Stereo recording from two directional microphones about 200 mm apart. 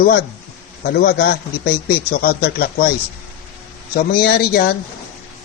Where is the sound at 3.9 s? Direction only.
50° left (ahead or behind).